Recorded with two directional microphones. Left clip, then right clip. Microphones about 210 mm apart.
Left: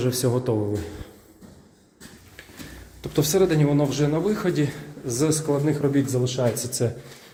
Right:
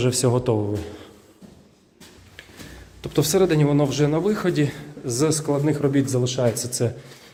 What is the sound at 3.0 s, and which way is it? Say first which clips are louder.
A man's voice: right 1 dB; 15° right (ahead or behind).